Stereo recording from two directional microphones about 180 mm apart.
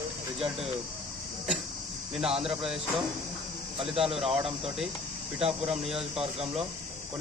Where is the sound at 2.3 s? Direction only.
30° right (ahead or behind).